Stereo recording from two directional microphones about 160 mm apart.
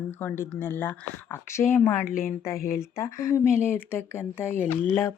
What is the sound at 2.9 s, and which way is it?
Speech, 20° left (ahead or behind).